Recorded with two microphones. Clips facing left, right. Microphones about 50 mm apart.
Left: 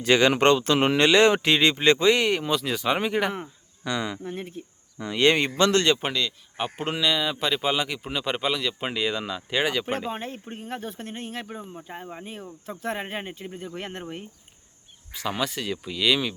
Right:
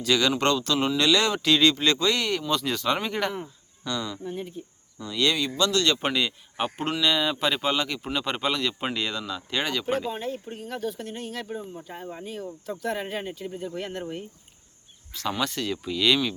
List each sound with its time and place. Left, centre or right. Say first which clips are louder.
0.0 s speech: left 4 dB; left
2.5 s speech: left 1 dB; centre
3.8 s speech: left 2 dB; left
5.1 s speech: left 4 dB; left
6.1 s speech: right 1 dB; centre
7.0 s speech: right 1 dB; centre
10.1 s speech: right 1 dB; left
15.1 s speech: even; centre